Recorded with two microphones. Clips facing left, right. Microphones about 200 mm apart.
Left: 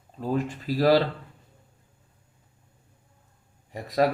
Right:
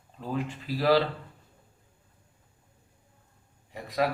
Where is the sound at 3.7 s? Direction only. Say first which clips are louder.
Left 5 dB; 40° left (ahead or behind).